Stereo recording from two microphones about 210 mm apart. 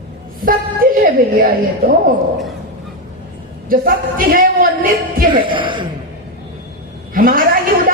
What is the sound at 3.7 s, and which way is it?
Speech, 45° right (ahead or behind).